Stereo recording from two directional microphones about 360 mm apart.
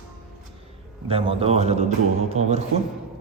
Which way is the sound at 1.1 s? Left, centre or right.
Centre.